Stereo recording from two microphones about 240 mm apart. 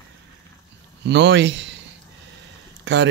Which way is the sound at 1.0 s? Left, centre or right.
Right.